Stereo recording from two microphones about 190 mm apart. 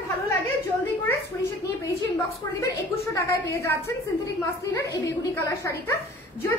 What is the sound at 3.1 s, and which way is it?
Speech, 15° left (ahead or behind).